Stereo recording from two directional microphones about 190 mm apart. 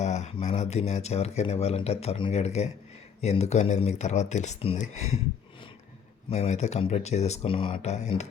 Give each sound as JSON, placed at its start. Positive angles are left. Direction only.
{"t": 0.0, "sound": "speech", "side_deg": 35}
{"t": 6.3, "sound": "speech", "side_deg": 35}